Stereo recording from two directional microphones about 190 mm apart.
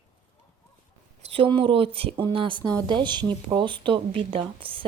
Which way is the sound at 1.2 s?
30° right (ahead or behind).